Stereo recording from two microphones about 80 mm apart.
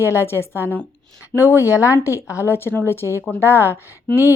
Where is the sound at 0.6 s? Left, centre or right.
Right.